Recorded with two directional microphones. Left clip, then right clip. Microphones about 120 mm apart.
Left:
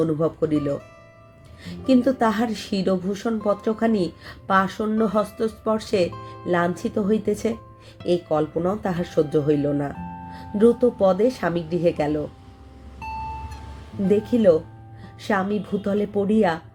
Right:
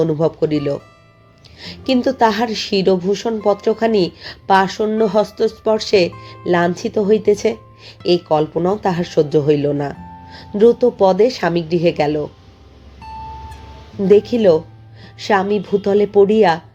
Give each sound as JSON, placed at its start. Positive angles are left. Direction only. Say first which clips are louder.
{"t": 0.0, "sound": "speech", "louder": "right 6 dB", "side_deg": -20}
{"t": 1.9, "sound": "speech", "louder": "right 5 dB", "side_deg": -20}
{"t": 14.1, "sound": "speech", "louder": "right 6 dB", "side_deg": -25}